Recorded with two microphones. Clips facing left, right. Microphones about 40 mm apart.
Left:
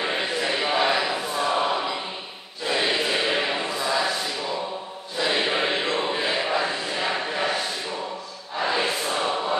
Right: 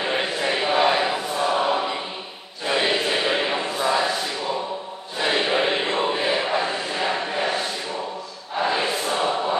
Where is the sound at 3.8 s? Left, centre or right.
Right.